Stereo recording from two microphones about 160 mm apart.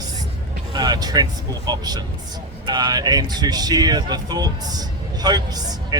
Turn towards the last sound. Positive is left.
turn(degrees=-25)  # may be behind; listen again after turning